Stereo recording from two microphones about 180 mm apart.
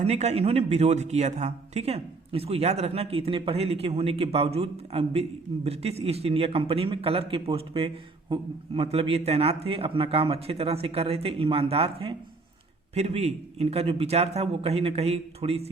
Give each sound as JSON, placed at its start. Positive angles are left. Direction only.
{"t": 0.0, "sound": "a man's voice", "side_deg": -35}